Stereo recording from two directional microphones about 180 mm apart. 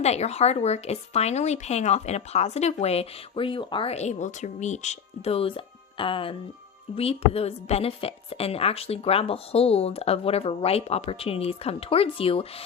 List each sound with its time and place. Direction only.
0.0 s speech: 35° left (ahead or behind)